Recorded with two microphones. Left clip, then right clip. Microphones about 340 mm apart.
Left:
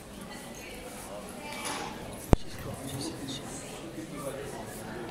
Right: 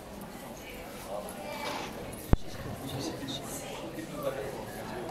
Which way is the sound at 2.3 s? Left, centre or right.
Left.